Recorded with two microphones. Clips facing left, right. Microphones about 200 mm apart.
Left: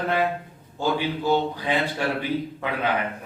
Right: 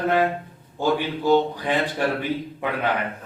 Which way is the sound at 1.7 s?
45° right (ahead or behind).